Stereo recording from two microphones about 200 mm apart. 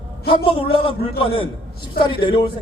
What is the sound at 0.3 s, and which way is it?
A man's voice, 25° left (ahead or behind).